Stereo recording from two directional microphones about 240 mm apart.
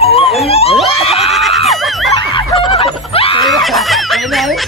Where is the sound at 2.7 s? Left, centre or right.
Left.